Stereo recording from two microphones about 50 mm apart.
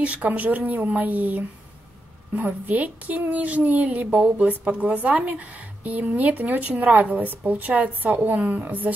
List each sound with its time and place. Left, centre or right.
0.0 s a woman's voice: right